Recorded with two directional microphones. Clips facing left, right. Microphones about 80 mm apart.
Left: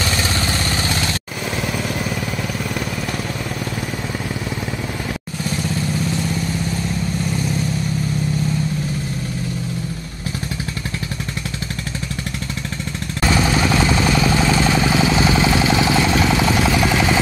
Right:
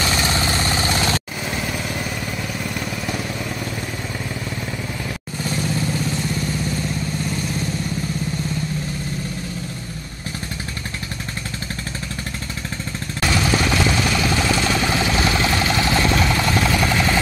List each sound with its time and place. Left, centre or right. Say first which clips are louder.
0.0 s vehicle: right 1 dB; centre
13.3 s vehicle: left 2 dB; left; by 17.2 s centre